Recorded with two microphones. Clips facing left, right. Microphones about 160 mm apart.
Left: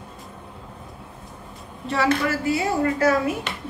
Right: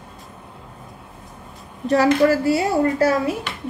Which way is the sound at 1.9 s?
40° right (ahead or behind).